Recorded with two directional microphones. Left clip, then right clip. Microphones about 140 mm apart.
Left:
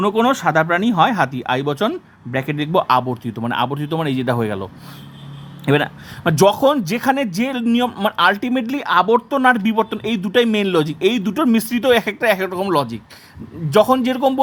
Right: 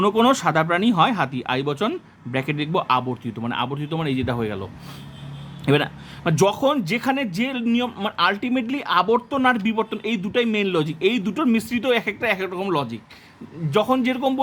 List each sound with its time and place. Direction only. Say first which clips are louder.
0.0 s speech: left 2 dB; 10° left (ahead or behind); by 4.7 s 30° left (ahead or behind)
5.6 s speech: left 3 dB; 15° left (ahead or behind)